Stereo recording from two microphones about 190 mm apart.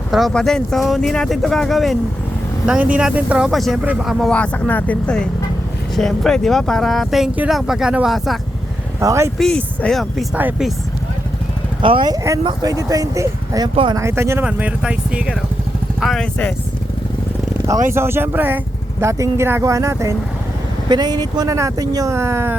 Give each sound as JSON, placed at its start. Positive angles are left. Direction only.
{"t": 0.1, "sound": "speech", "side_deg": 0}
{"t": 9.0, "sound": "speech", "side_deg": -15}
{"t": 9.4, "sound": "speech", "side_deg": 5}
{"t": 11.8, "sound": "speech", "side_deg": -25}
{"t": 14.0, "sound": "speech", "side_deg": -15}
{"t": 17.9, "sound": "speech", "side_deg": -10}